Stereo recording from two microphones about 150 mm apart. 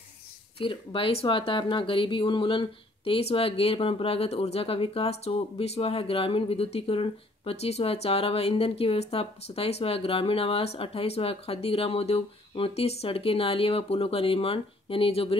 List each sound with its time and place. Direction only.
0.6 s speech: 35° left (ahead or behind)